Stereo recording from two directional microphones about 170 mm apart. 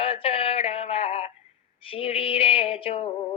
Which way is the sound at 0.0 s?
35° left (ahead or behind).